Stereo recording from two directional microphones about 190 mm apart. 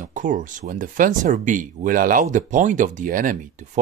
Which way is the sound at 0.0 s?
40° right (ahead or behind).